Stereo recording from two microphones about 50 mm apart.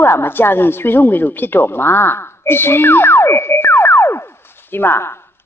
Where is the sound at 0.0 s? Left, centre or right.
Left.